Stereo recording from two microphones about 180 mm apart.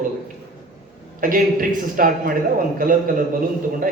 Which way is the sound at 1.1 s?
50° right (ahead or behind).